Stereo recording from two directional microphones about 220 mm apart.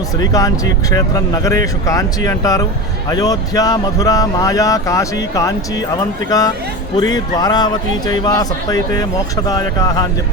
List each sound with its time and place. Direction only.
0.2 s speech: 15° left (ahead or behind)